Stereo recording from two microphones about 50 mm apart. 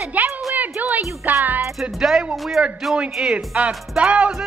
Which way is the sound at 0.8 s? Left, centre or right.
Right.